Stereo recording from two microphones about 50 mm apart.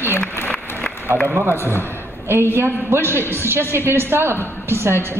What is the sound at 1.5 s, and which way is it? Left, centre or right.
Speech, left.